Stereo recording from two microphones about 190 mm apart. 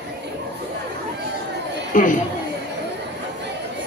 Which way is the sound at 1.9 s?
45° left (ahead or behind).